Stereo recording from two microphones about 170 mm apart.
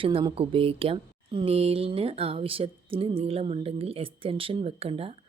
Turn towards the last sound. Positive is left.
turn(degrees=-35)  # may be behind; listen again after turning